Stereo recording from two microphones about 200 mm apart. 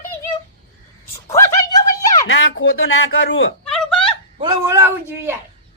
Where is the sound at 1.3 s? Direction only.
15° left (ahead or behind).